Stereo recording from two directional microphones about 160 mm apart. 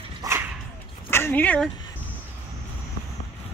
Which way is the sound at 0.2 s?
20° right (ahead or behind).